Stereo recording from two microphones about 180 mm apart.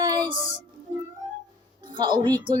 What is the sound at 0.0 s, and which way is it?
Music, 20° right (ahead or behind).